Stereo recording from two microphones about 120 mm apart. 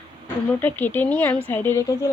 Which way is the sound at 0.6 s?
15° left (ahead or behind).